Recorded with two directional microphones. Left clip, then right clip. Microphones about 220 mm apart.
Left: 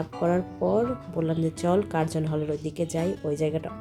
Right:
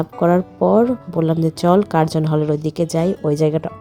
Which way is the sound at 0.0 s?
35° right (ahead or behind).